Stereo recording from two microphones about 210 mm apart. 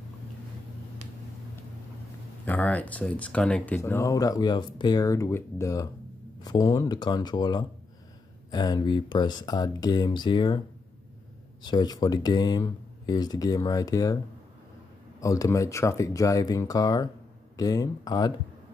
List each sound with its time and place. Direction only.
2.4 s speech: 5° left (ahead or behind)
11.6 s speech: 20° left (ahead or behind)
15.1 s speech: 15° left (ahead or behind)